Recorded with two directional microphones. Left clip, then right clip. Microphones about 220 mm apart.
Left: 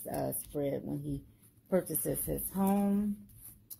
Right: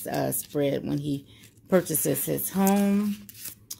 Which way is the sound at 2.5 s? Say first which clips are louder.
Right 8 dB; 20° right (ahead or behind).